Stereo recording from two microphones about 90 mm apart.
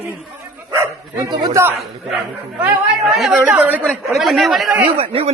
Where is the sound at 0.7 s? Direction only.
30° right (ahead or behind).